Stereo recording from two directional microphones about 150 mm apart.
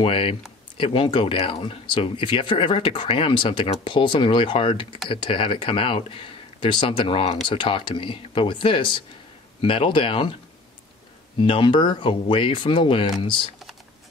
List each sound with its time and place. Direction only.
0.0 s speech: 35° left (ahead or behind)
11.4 s speech: 35° left (ahead or behind)